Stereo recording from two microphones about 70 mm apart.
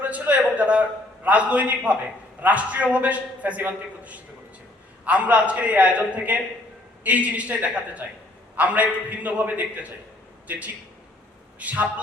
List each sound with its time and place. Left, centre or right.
0.0 s a man's voice: right